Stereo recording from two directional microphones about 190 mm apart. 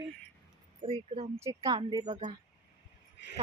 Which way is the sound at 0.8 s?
30° right (ahead or behind).